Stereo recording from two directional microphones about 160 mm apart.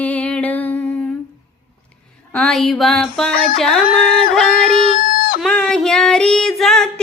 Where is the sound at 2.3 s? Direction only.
5° left (ahead or behind).